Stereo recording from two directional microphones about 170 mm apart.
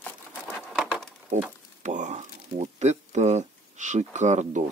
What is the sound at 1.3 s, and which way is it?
Speech, 45° right (ahead or behind).